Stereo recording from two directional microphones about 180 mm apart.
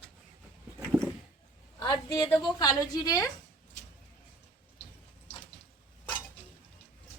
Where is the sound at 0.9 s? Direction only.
5° right (ahead or behind).